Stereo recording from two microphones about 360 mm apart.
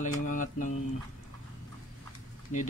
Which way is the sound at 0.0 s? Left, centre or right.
Left.